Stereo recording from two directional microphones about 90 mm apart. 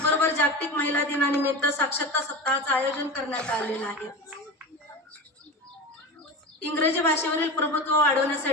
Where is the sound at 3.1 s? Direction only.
10° left (ahead or behind).